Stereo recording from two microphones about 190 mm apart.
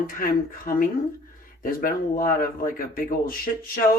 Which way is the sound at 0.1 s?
45° left (ahead or behind).